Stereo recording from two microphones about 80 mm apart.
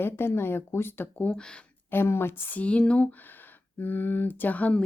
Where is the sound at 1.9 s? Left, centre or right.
Left; by 3.0 s centre.